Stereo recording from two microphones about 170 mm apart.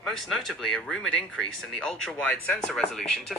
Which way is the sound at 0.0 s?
Centre (ahead or behind).